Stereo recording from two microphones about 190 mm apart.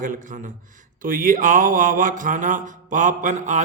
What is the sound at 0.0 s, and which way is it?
A man's voice, 45° right (ahead or behind).